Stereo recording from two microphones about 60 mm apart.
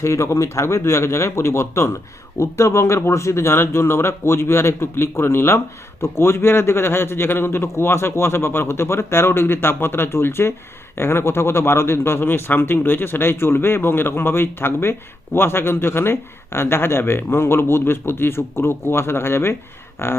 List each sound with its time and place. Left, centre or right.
0.0 s speech: left